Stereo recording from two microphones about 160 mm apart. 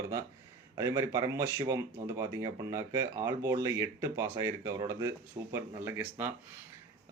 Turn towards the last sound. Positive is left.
turn(degrees=-15)  # may be behind; listen again after turning